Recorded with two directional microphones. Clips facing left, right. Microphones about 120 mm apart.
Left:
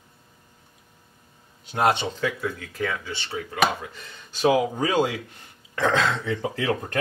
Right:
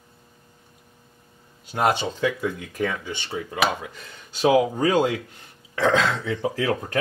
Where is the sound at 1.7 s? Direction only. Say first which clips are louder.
Even; 5° right (ahead or behind).